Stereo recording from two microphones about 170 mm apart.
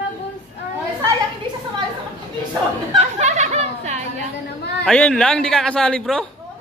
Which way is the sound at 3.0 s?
40° right (ahead or behind).